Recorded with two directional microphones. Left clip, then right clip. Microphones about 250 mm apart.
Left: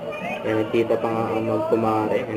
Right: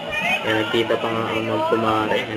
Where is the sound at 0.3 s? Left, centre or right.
Centre.